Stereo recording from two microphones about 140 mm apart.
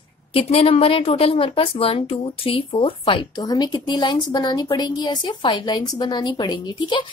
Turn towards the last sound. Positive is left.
turn(degrees=35)  # may be behind; listen again after turning